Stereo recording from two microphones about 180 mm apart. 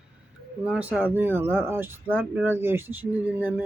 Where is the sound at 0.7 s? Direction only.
5° right (ahead or behind).